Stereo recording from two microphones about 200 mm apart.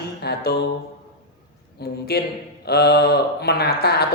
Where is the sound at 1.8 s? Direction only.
55° left (ahead or behind).